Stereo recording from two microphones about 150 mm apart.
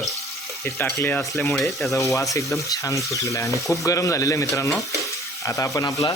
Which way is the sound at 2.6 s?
20° left (ahead or behind).